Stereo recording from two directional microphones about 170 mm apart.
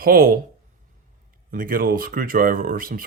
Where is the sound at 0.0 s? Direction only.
55° right (ahead or behind).